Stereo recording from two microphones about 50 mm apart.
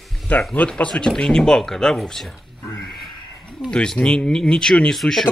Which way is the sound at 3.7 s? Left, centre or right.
Centre.